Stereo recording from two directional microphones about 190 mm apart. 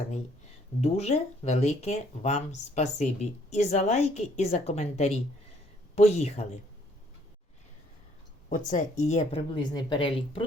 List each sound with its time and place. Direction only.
0.8 s speech: 35° left (ahead or behind)
8.4 s speech: 40° left (ahead or behind)
9.6 s speech: 25° left (ahead or behind)